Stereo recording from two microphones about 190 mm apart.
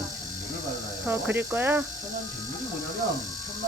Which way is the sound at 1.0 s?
10° right (ahead or behind).